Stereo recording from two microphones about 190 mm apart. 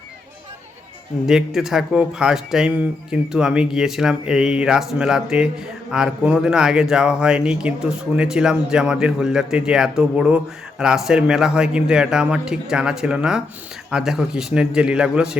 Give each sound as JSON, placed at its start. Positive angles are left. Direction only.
{"t": 1.3, "sound": "speech", "side_deg": 0}